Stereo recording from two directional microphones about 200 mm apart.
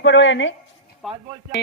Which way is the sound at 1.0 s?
Centre (ahead or behind).